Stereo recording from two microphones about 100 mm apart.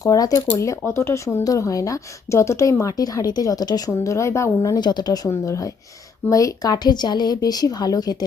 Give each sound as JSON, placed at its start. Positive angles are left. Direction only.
{"t": 0.0, "sound": "a woman's voice", "side_deg": 35}